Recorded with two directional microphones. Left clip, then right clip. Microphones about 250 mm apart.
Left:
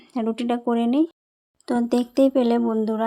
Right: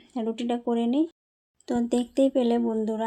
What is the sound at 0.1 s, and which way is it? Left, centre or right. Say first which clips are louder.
Speech: left 4 dB; centre.